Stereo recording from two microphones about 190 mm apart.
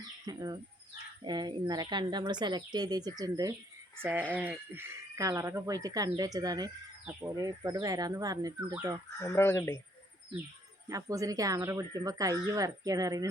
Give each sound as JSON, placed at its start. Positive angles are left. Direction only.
{"t": 0.3, "sound": "speech", "side_deg": -20}
{"t": 9.2, "sound": "speech", "side_deg": 15}
{"t": 10.8, "sound": "speech", "side_deg": -15}